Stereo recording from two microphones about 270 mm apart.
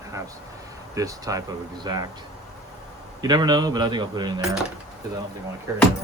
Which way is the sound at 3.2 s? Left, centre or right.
Centre.